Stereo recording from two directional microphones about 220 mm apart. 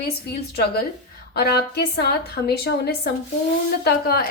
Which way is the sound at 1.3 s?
45° left (ahead or behind).